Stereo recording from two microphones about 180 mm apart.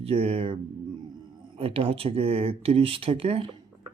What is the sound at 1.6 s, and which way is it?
Speech, 30° right (ahead or behind).